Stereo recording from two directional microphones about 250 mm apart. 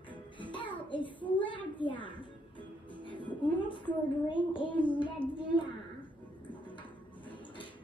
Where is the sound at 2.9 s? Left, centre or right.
Centre.